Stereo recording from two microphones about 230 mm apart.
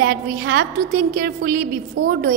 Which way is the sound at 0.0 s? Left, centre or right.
Right.